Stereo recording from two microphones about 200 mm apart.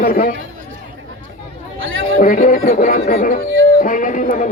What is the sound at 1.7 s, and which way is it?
Chatter, 80° right.